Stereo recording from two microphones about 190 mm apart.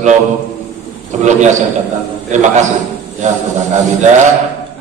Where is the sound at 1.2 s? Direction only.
40° right (ahead or behind).